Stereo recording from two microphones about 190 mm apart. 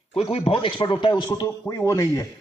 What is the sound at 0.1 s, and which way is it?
A man's voice, 30° left (ahead or behind).